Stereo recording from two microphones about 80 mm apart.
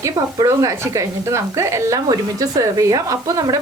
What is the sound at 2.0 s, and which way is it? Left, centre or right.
Speech, right.